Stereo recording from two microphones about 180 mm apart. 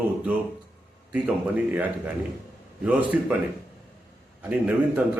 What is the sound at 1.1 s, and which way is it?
A man's voice, 5° right (ahead or behind).